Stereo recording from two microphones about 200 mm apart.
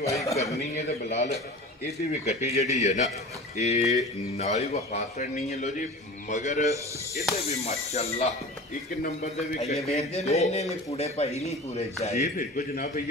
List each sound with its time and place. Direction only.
0.1 s speech: 15° left (ahead or behind)
0.6 s a man's voice: 35° left (ahead or behind)